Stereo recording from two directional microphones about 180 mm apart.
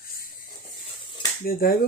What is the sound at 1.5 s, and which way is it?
Speech, 55° left (ahead or behind).